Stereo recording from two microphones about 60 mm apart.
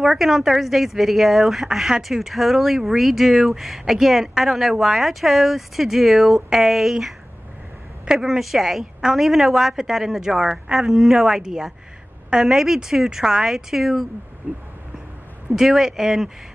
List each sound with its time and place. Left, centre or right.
0.0 s a woman's voice: centre
14.5 s a sound: right
15.5 s a woman's voice: centre